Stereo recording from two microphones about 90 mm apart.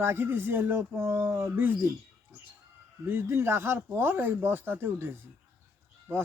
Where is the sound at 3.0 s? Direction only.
25° right (ahead or behind).